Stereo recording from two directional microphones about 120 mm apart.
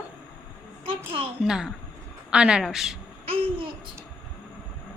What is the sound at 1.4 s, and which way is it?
A woman's voice, 5° right (ahead or behind).